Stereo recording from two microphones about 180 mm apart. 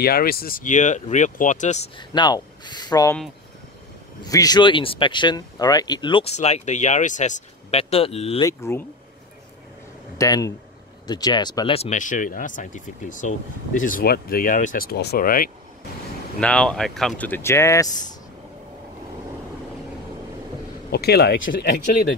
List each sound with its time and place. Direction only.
0.0 s speech: 55° left (ahead or behind)
2.0 s speech: 25° left (ahead or behind)
4.2 s speech: 20° left (ahead or behind)
8.4 s speech: 15° left (ahead or behind)
10.1 s speech: 20° left (ahead or behind); by 15.5 s 50° left (ahead or behind)
16.3 s speech: 5° left (ahead or behind)
20.9 s speech: 60° left (ahead or behind)